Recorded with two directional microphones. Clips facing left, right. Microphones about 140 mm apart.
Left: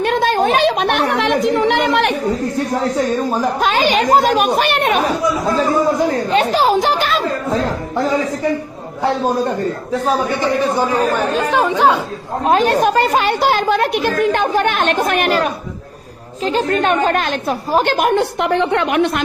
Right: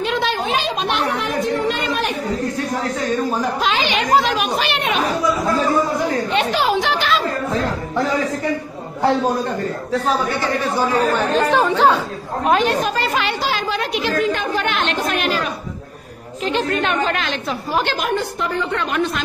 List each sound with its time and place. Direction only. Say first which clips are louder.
0.0 s a woman's voice: left 6 dB; 50° left (ahead or behind); by 2.1 s 70° left (ahead or behind)
3.6 s a woman's voice: left 5 dB; 45° left (ahead or behind)
6.3 s speech: left 5 dB; 40° left (ahead or behind)
10.4 s speech: left 4 dB; 15° left (ahead or behind)
12.4 s a woman's voice: left 4 dB; 40° left (ahead or behind)
16.4 s a woman's voice: left 4 dB; 45° left (ahead or behind); by 19.2 s 65° left (ahead or behind)